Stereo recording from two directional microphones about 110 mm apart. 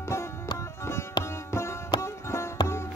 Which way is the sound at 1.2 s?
25° left (ahead or behind).